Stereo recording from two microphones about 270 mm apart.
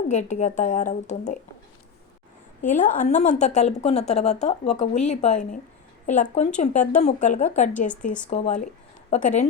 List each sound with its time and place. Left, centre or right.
0.1 s a woman's voice: left
2.6 s a woman's voice: left